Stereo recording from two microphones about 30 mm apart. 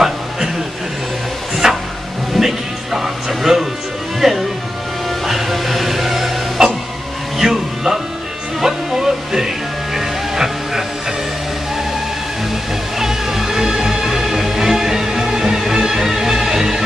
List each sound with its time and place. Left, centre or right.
1.6 s a sound: centre
2.3 s music: centre
6.6 s printer: centre
7.4 s music: centre
13.0 s music: centre